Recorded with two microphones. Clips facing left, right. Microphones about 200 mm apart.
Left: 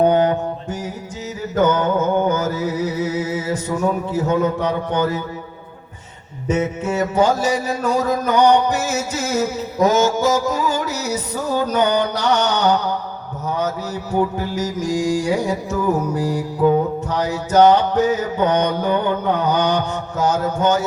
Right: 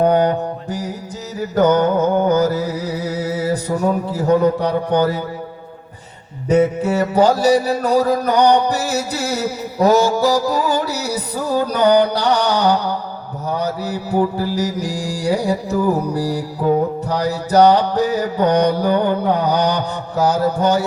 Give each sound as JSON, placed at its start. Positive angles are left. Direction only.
{"t": 0.3, "sound": "mantra", "side_deg": -35}
{"t": 1.4, "sound": "music", "side_deg": -35}
{"t": 6.5, "sound": "music", "side_deg": -35}